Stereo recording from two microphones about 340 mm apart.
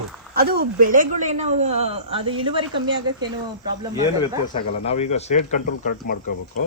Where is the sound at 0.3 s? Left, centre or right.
Right.